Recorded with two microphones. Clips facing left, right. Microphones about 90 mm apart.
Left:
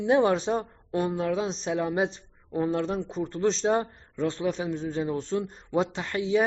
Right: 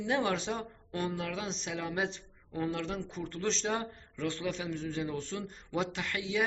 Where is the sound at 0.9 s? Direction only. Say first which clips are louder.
Left 9 dB; 25° left (ahead or behind).